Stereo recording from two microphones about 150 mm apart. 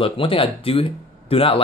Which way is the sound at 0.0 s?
35° left (ahead or behind).